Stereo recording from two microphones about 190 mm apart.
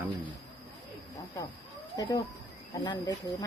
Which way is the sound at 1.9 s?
20° left (ahead or behind).